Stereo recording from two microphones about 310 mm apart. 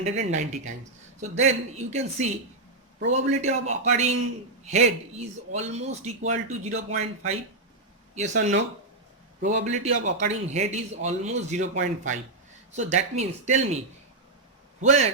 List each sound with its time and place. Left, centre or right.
0.3 s a man's voice: right